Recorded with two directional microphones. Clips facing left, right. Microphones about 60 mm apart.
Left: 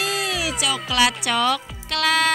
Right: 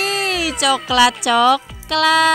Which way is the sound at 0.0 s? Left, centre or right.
Right.